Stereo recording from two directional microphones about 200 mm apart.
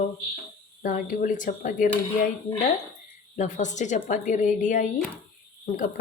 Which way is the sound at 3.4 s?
35° left (ahead or behind).